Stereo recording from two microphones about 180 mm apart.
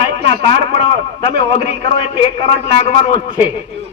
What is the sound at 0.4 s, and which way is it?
A man's voice, 30° left (ahead or behind).